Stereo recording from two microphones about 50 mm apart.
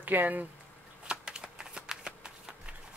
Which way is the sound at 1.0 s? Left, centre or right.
Centre.